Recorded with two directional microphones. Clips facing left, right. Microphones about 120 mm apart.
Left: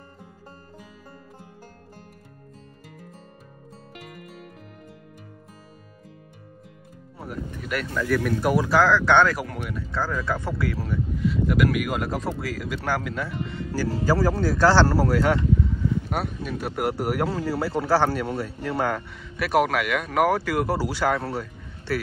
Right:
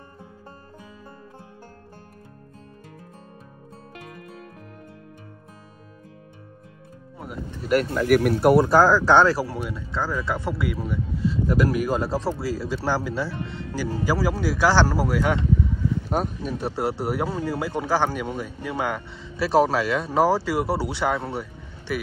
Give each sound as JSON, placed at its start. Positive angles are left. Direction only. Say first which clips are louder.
{"t": 7.6, "sound": "speech", "louder": "right 7 dB", "side_deg": -40}
{"t": 8.1, "sound": "speech", "louder": "right 5 dB", "side_deg": -60}
{"t": 8.6, "sound": "speech", "louder": "right 2 dB", "side_deg": -40}
{"t": 11.4, "sound": "speech", "louder": "right 1 dB", "side_deg": -35}
{"t": 13.7, "sound": "speech", "louder": "left 2 dB", "side_deg": -15}
{"t": 16.1, "sound": "speech", "louder": "right 3 dB", "side_deg": -35}
{"t": 19.3, "sound": "speech", "louder": "right 2 dB", "side_deg": -30}